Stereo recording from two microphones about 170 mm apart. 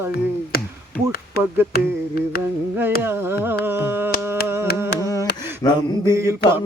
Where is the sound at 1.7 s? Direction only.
65° left (ahead or behind).